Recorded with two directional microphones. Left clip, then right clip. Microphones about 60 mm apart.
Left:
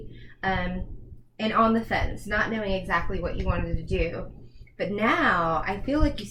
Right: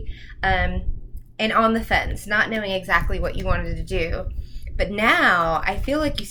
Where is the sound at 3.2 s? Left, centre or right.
Right.